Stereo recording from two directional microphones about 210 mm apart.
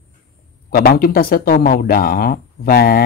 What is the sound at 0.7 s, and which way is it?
Speech, 45° left (ahead or behind).